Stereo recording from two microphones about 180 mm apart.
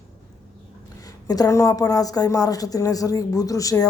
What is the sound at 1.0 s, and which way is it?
A woman's voice, 20° left (ahead or behind).